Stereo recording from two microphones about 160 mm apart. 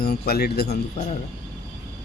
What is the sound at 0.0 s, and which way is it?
Speech, 75° left (ahead or behind).